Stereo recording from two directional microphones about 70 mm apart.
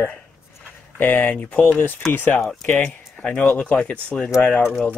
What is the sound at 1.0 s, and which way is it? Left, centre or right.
Speech, left.